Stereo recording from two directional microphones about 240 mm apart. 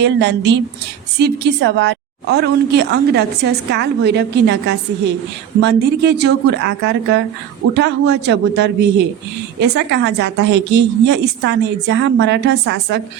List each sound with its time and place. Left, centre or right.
0.0 s a woman's voice: right